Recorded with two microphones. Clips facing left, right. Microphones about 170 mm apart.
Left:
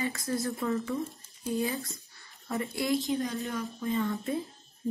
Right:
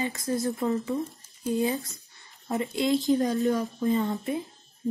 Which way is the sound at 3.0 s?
40° right (ahead or behind).